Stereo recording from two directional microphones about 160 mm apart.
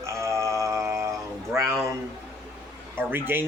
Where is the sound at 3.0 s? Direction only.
15° right (ahead or behind).